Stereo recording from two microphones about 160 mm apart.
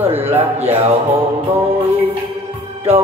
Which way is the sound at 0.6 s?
40° right (ahead or behind).